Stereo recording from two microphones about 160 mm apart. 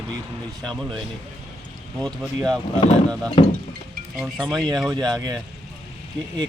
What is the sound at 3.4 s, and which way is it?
Speech, 35° left (ahead or behind).